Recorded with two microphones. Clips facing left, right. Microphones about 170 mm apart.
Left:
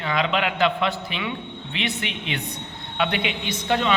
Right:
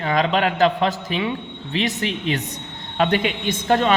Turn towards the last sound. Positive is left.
turn(degrees=-45)  # may be behind; listen again after turning